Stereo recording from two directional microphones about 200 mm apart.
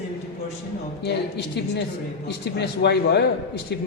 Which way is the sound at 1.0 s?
55° left (ahead or behind).